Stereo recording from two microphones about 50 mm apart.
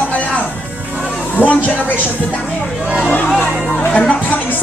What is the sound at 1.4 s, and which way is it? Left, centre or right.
Speech, left.